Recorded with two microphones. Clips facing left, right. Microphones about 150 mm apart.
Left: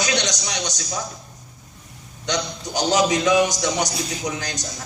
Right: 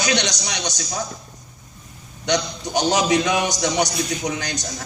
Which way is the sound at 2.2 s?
65° right (ahead or behind).